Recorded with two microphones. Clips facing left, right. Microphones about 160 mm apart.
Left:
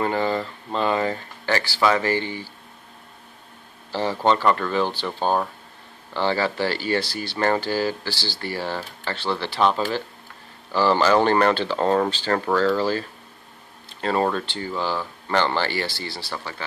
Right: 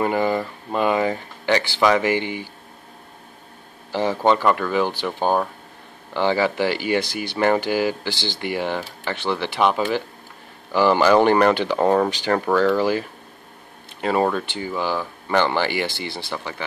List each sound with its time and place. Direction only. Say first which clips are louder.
0.0 s speech: right 2 dB; 15° right (ahead or behind)
3.9 s speech: right 2 dB; 15° right (ahead or behind)
14.0 s speech: right 2 dB; 10° right (ahead or behind)